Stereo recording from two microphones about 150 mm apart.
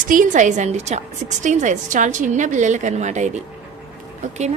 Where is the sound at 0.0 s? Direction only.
65° right (ahead or behind).